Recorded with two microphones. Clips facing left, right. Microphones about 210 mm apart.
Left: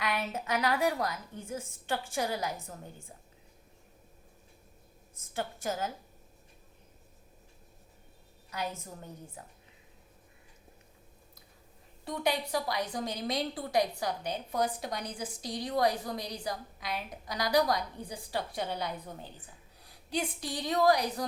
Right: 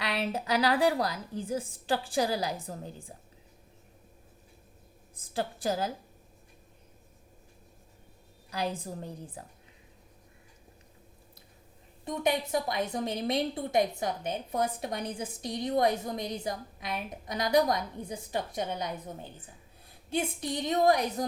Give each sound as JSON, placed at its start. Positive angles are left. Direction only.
{"t": 0.0, "sound": "a woman's voice", "side_deg": -30}
{"t": 5.1, "sound": "a woman's voice", "side_deg": -35}
{"t": 8.4, "sound": "a woman's voice", "side_deg": -30}
{"t": 12.0, "sound": "a woman's voice", "side_deg": -20}